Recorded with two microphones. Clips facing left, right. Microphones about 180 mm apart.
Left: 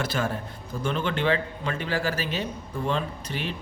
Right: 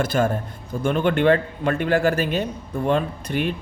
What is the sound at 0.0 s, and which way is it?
Speech, 50° right (ahead or behind).